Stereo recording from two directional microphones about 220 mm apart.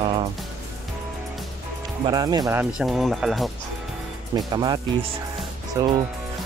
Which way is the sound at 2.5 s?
5° right (ahead or behind).